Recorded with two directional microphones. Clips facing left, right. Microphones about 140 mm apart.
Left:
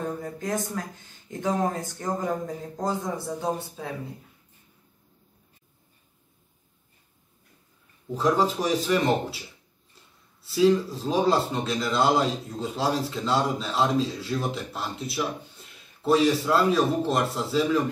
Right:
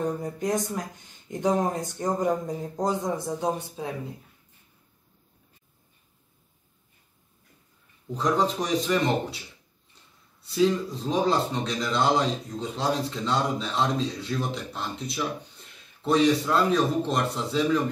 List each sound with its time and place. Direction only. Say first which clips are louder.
0.0 s speech: right 3 dB; 15° right (ahead or behind)
8.1 s speech: left 2 dB; 5° left (ahead or behind)
10.4 s speech: left 3 dB; 5° left (ahead or behind)